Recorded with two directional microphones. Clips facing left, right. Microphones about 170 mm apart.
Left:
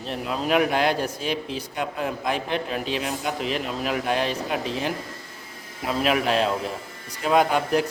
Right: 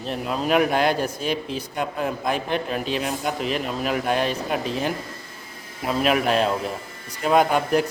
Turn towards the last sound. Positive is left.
turn(degrees=-50)  # may be behind; listen again after turning